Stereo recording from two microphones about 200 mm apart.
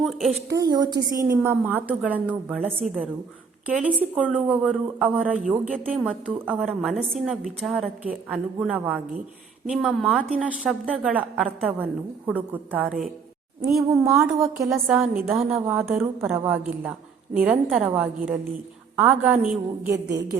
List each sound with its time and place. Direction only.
0.0 s a woman's voice: centre (ahead or behind)
0.5 s a woman's voice: 20° right (ahead or behind)